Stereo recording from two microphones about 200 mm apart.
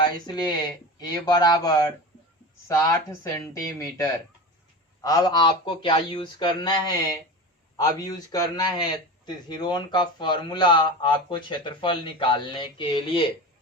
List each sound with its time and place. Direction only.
0.0 s speech: 20° left (ahead or behind)